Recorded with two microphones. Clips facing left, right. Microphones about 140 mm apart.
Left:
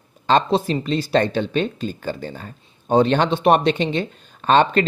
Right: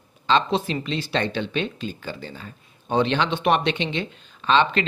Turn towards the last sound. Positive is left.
turn(degrees=45)  # may be behind; listen again after turning